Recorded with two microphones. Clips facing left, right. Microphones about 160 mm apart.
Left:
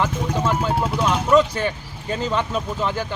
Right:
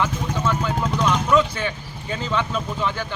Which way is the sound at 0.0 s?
35° left (ahead or behind).